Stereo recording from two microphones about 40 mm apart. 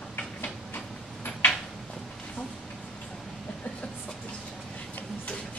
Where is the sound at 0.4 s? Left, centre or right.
Left.